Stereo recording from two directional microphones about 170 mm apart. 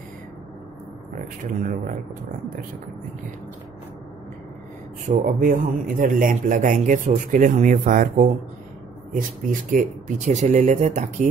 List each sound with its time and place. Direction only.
1.4 s a man's voice: 50° right (ahead or behind)
5.1 s a man's voice: 55° right (ahead or behind)
9.5 s a man's voice: 50° right (ahead or behind)